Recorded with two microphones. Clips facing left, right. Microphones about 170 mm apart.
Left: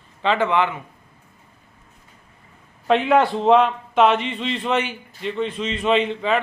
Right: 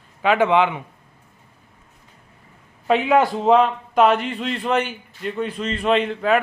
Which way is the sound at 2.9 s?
Centre (ahead or behind).